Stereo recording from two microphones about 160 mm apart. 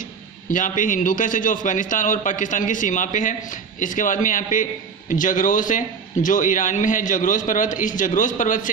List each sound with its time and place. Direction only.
0.5 s a man's voice: 55° left (ahead or behind)